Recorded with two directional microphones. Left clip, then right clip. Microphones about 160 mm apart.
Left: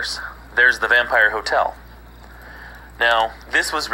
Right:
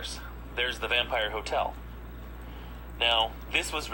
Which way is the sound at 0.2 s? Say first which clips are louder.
Left 16 dB; 45° left (ahead or behind).